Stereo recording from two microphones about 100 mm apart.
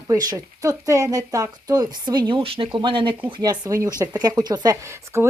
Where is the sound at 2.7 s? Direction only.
55° right (ahead or behind).